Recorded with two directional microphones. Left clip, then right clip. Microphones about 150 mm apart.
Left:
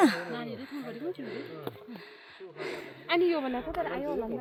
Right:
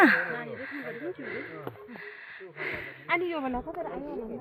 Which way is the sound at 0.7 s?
20° left (ahead or behind).